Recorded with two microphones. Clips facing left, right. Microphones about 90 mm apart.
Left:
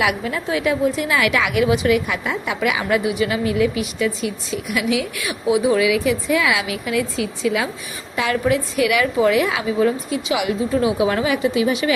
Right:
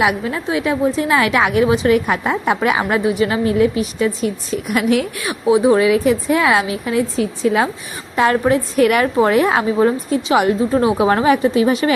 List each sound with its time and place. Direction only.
0.0 s a woman's voice: 30° right (ahead or behind)